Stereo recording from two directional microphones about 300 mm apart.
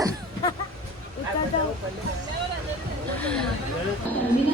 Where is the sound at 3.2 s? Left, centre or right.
Centre.